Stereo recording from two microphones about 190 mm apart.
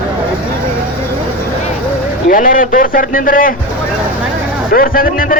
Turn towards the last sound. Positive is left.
turn(degrees=50)  # may be behind; listen again after turning